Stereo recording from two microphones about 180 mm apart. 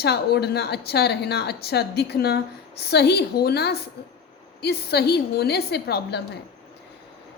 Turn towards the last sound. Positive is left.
turn(degrees=65)  # may be behind; listen again after turning